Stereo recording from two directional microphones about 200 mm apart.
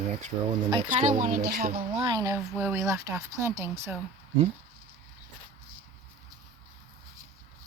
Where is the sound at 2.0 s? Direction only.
20° right (ahead or behind).